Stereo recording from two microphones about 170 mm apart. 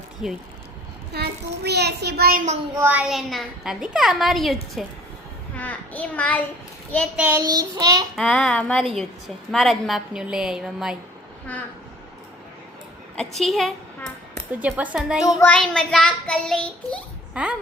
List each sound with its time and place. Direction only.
0.2 s a woman's voice: 5° right (ahead or behind)
1.1 s a child's voice: 70° right (ahead or behind)
2.7 s speech: 10° right (ahead or behind)
3.1 s a woman's voice: centre (ahead or behind)
5.5 s child singing: 10° left (ahead or behind)
7.2 s speech: 10° right (ahead or behind)
7.4 s child singing: 20° right (ahead or behind)
8.1 s a woman's voice: 5° left (ahead or behind)
13.1 s a woman's voice: centre (ahead or behind)
15.2 s child singing: 20° left (ahead or behind)
15.4 s a woman's voice: 5° left (ahead or behind)
17.4 s a woman's voice: 5° right (ahead or behind)